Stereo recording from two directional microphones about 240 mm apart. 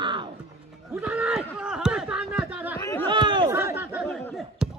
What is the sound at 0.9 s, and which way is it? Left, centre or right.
Speech, centre.